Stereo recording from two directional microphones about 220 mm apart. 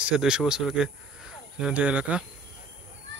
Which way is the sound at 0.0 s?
Centre (ahead or behind).